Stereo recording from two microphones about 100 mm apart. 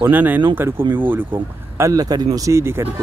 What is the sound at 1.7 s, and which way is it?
Speech, 35° right (ahead or behind).